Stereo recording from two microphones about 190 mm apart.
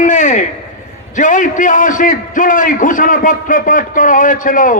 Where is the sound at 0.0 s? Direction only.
40° left (ahead or behind).